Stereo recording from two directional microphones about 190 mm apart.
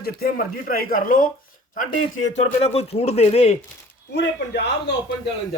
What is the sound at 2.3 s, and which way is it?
Speech, 35° left (ahead or behind).